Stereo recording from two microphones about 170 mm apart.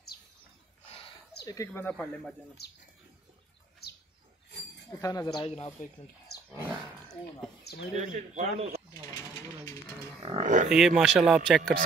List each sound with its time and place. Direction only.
0.8 s a sound: 35° left (ahead or behind)
1.4 s speech: 20° left (ahead or behind)
2.6 s speech: 70° left (ahead or behind)
3.8 s bird: 70° left (ahead or behind)
5.0 s speech: 25° left (ahead or behind)
6.3 s wild animals: 70° left (ahead or behind)
7.9 s speech: 45° right (ahead or behind)
9.1 s sewing machine: 20° left (ahead or behind)
10.4 s speech: 50° right (ahead or behind)
10.7 s speech: 5° right (ahead or behind)